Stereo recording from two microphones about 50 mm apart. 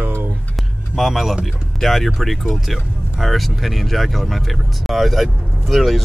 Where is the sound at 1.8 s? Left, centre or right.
Centre.